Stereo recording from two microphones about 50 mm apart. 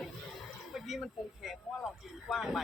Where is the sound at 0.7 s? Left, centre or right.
Centre.